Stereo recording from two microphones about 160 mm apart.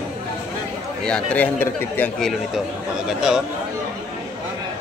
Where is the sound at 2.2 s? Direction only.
Centre (ahead or behind).